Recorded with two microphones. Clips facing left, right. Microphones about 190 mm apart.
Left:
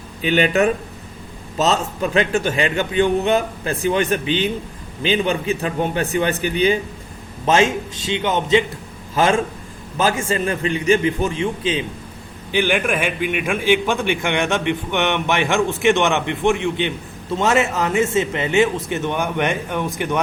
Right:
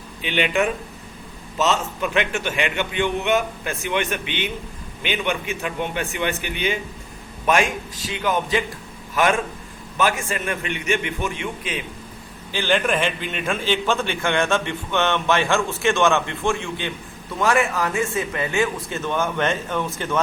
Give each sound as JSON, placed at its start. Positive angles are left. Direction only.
{"t": 0.2, "sound": "a man's voice", "side_deg": 40}
{"t": 7.4, "sound": "a man's voice", "side_deg": 25}
{"t": 12.5, "sound": "a man's voice", "side_deg": 15}